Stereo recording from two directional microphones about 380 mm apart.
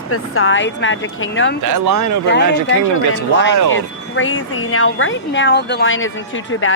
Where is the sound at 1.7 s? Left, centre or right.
Right.